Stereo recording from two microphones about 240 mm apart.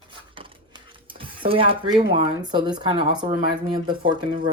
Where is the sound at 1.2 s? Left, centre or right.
Right.